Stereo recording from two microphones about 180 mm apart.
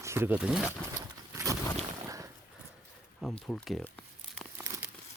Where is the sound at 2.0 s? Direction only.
15° right (ahead or behind).